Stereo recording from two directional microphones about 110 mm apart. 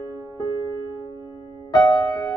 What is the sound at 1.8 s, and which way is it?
Music, 35° left (ahead or behind).